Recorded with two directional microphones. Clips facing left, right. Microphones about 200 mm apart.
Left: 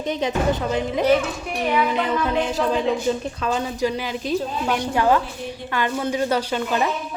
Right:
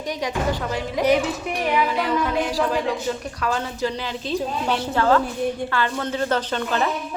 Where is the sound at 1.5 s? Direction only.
15° right (ahead or behind).